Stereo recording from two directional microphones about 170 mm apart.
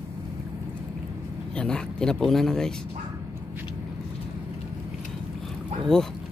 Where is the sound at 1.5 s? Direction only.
5° left (ahead or behind).